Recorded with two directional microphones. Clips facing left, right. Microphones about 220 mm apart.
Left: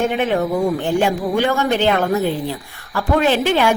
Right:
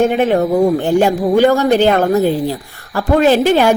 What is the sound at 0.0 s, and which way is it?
A woman's voice, 40° right (ahead or behind).